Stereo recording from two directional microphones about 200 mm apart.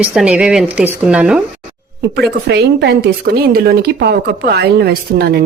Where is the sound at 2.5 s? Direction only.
55° right (ahead or behind).